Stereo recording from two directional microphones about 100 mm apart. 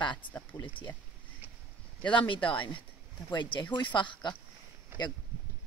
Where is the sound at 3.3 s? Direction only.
50° left (ahead or behind).